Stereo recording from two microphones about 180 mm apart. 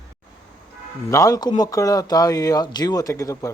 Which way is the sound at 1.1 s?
20° left (ahead or behind).